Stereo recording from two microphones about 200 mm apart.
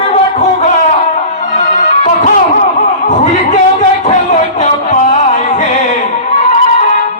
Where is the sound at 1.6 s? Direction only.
40° left (ahead or behind).